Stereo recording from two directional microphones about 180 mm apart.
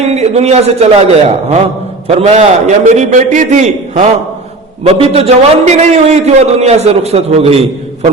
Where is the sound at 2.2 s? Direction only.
40° right (ahead or behind).